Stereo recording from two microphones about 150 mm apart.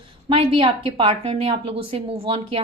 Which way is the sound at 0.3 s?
35° right (ahead or behind).